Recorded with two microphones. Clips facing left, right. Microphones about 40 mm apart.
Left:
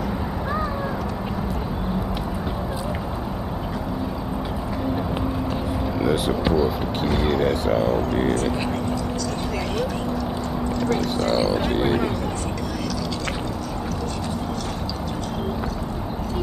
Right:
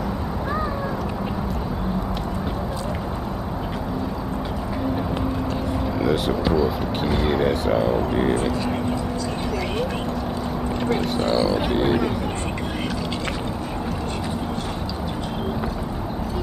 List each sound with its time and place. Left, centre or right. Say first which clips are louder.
5.9 s vehicle: even; centre
6.5 s speech: even; centre
10.8 s speech: even; right
11.3 s speech: right 1 dB; centre